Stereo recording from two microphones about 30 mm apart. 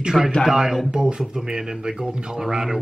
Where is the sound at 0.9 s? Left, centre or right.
Right.